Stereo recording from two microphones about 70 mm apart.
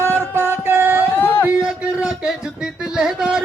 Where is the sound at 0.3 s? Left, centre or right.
Right.